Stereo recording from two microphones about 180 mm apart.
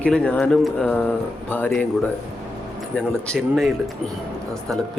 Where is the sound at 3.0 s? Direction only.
5° left (ahead or behind).